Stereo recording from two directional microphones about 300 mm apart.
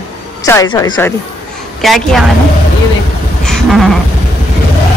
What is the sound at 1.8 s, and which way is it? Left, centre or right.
Speech, centre.